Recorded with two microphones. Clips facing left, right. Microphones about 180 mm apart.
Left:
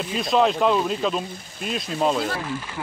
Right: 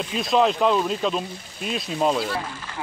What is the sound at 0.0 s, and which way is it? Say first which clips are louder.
Speech: even; centre (ahead or behind).